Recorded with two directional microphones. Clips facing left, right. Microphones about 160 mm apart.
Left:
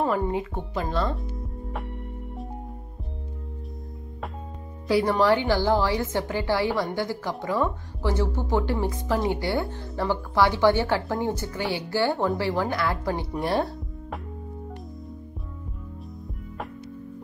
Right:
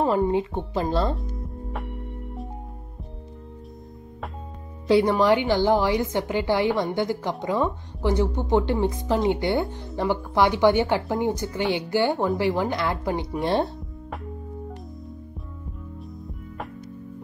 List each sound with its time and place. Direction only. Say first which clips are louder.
0.0 s speech: right 3 dB; 25° right (ahead or behind)
4.8 s a woman's voice: right 2 dB; 20° right (ahead or behind)